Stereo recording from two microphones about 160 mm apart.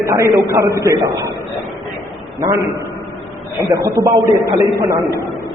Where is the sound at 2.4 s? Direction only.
20° right (ahead or behind).